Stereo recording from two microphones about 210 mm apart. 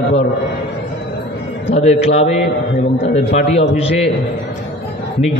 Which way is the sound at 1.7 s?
30° left (ahead or behind).